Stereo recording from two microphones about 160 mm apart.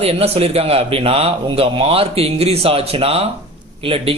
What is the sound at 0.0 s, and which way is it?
A man's voice, 40° right (ahead or behind).